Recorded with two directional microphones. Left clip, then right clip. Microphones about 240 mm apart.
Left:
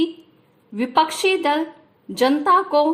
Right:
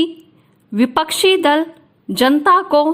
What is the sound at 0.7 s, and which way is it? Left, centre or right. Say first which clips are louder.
A woman's voice: right 2 dB; right.